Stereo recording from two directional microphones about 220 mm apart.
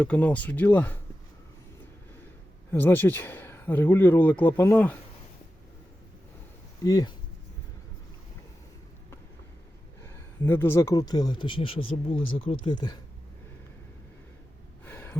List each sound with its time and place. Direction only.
0.0 s speech: 5° left (ahead or behind)
2.7 s speech: 10° left (ahead or behind)
6.8 s speech: 15° left (ahead or behind)
10.0 s speech: 10° left (ahead or behind)
14.8 s gasp: 10° left (ahead or behind)